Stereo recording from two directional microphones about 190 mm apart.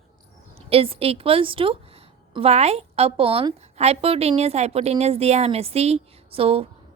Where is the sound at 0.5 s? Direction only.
30° right (ahead or behind).